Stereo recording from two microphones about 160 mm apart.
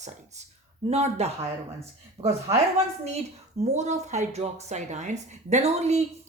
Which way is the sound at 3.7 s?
45° right (ahead or behind).